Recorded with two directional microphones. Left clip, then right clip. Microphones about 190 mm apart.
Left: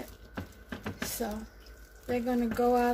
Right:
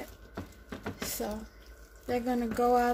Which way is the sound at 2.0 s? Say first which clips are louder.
Even; 45° right (ahead or behind).